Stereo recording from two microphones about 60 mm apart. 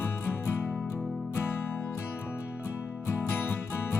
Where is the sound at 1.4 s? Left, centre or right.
Left.